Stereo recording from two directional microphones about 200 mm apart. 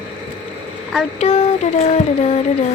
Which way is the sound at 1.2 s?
35° left (ahead or behind).